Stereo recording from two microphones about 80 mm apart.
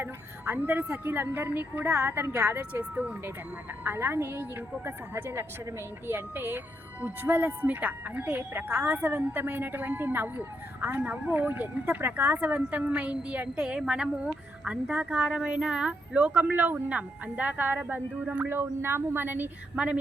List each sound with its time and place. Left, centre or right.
0.0 s a woman's voice: right
2.9 s a woman's voice: centre